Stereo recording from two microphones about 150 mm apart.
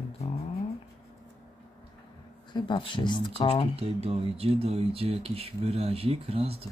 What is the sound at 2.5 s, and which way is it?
Speech, 30° left (ahead or behind).